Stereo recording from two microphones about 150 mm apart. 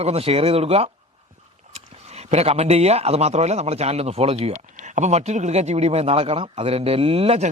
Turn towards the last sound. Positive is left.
turn(degrees=-40)  # may be behind; listen again after turning